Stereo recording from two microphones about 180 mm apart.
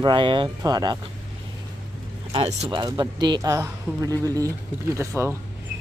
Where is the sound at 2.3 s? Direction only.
35° right (ahead or behind).